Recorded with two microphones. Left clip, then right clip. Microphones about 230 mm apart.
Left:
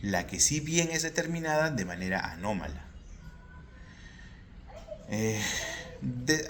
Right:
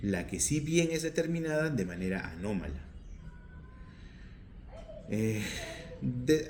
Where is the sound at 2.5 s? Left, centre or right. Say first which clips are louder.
Left 3 dB; left.